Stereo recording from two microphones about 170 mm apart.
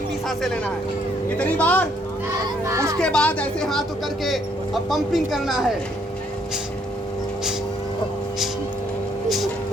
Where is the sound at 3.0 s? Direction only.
5° left (ahead or behind).